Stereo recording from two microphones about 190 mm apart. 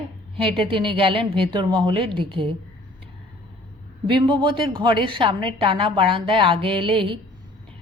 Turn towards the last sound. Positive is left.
turn(degrees=-25)  # may be behind; listen again after turning